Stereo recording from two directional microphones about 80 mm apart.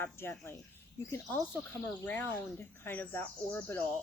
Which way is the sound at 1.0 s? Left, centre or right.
Left.